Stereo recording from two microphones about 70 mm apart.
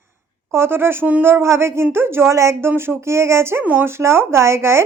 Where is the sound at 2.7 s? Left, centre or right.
Right.